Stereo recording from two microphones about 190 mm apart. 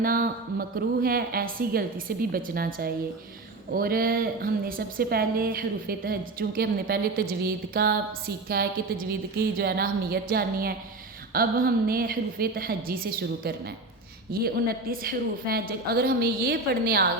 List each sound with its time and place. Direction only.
0.0 s a woman's voice: 50° right (ahead or behind)